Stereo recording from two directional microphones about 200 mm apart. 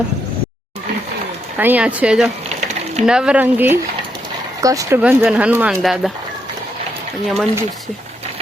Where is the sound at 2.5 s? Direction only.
35° right (ahead or behind).